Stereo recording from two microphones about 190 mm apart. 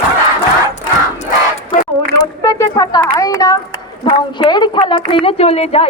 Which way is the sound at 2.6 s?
15° left (ahead or behind).